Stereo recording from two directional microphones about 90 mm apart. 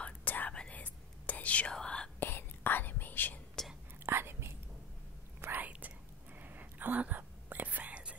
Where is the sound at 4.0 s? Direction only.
25° right (ahead or behind).